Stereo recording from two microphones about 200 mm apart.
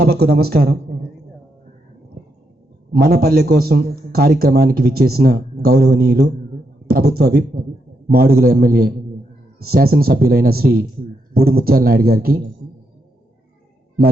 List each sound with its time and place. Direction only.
0.0 s a man's voice: 55° right (ahead or behind)
2.9 s a man's voice: 50° right (ahead or behind)